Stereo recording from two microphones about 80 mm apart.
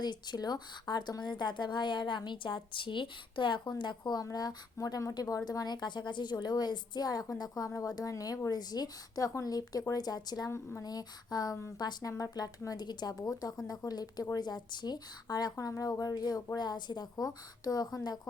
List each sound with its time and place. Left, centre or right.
0.0 s a woman's voice: left
4.2 s a woman's voice: left
5.5 s a woman's voice: left
10.5 s speech: left
10.8 s a woman's voice: left
16.6 s a woman's voice: left